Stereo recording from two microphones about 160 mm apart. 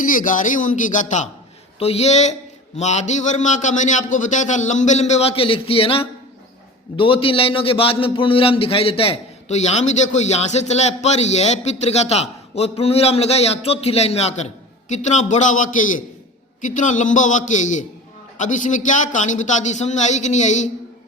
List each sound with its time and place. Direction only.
0.0 s a man's voice: 55° left (ahead or behind)
1.8 s a man's voice: 40° left (ahead or behind)